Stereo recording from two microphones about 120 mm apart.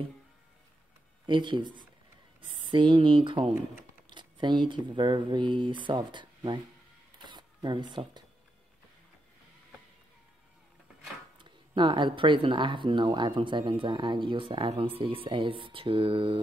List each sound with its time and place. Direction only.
1.2 s speech: 40° right (ahead or behind)
7.2 s zipper: 40° right (ahead or behind)
11.3 s speech: 40° right (ahead or behind)